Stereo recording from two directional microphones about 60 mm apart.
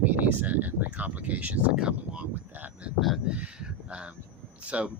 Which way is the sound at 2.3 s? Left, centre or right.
Right.